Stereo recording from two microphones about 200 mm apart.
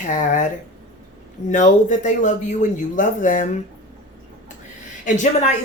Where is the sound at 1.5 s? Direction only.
40° left (ahead or behind).